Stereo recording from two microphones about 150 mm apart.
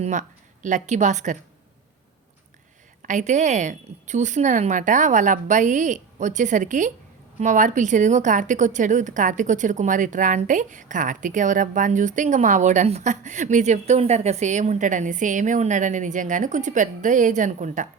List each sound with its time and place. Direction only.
0.0 s a woman's voice: 55° right (ahead or behind)
3.0 s a woman's voice: 55° right (ahead or behind)